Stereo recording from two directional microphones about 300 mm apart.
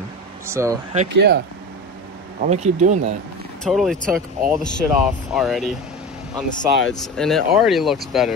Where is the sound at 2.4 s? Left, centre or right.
Right.